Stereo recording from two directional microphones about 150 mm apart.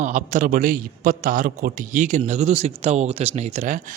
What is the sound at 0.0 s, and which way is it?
Speech, 55° right (ahead or behind).